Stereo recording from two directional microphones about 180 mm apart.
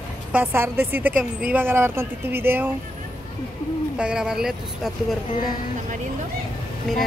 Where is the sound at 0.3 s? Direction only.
10° right (ahead or behind).